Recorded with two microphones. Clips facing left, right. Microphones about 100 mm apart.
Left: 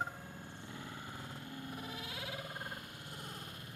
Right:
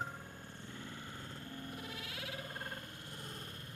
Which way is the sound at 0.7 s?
10° left (ahead or behind).